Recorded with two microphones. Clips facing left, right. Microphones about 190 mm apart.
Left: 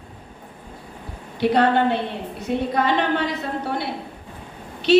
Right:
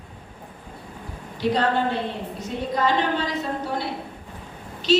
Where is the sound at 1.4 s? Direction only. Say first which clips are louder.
Left 4 dB; 65° left (ahead or behind).